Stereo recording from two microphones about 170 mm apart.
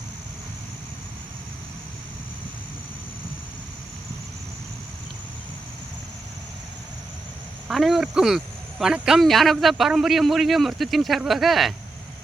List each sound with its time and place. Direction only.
7.7 s a man's voice: centre (ahead or behind)